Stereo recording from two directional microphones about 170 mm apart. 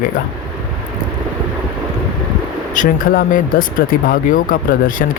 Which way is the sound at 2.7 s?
50° left (ahead or behind).